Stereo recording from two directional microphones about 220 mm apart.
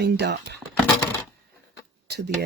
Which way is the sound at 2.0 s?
50° right (ahead or behind).